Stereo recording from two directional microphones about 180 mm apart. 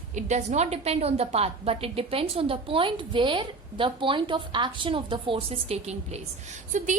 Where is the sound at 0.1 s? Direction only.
40° right (ahead or behind).